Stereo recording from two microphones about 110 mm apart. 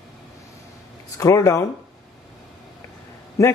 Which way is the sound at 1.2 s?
30° left (ahead or behind).